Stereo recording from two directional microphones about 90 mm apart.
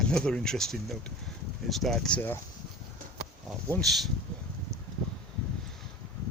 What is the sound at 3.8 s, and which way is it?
Speech, centre (ahead or behind).